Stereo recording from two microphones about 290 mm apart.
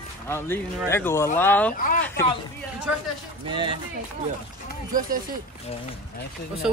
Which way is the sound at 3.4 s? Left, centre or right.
Centre.